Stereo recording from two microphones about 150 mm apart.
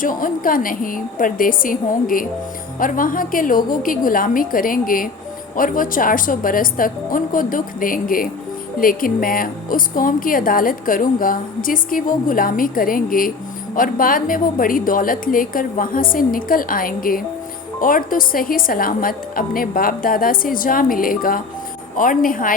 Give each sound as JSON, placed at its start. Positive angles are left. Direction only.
{"t": 0.0, "sound": "a woman's voice", "side_deg": 65}